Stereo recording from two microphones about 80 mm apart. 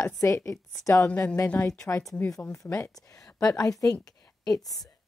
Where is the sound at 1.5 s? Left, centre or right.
Left.